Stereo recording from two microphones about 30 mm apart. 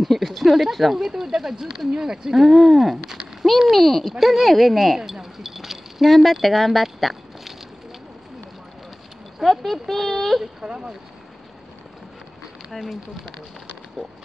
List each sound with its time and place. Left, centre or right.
0.0 s a sound: centre
0.9 s speech: centre
2.3 s speech: centre
4.1 s speech: centre
4.9 s a sound: centre
6.4 s speech: centre
9.4 s speech: centre
10.6 s speech: right
12.7 s speech: centre
14.0 s speech: right